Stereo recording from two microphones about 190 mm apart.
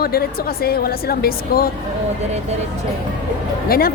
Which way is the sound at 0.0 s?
55° left (ahead or behind).